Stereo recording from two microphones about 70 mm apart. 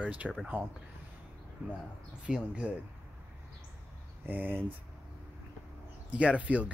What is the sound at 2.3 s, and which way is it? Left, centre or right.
Speech, centre.